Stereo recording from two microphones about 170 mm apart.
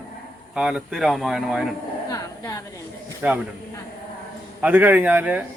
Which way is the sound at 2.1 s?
20° left (ahead or behind).